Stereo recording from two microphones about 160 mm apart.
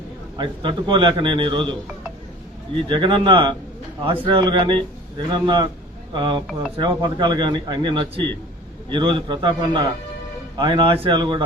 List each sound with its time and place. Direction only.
0.3 s a man's voice: 30° right (ahead or behind)
2.9 s a man's voice: 30° right (ahead or behind)